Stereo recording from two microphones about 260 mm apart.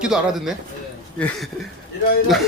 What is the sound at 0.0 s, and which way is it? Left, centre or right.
Speech, centre.